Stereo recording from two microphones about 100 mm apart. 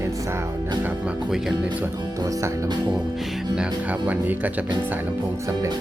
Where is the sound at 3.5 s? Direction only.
15° right (ahead or behind).